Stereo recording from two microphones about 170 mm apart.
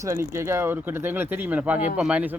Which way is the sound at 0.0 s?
15° right (ahead or behind).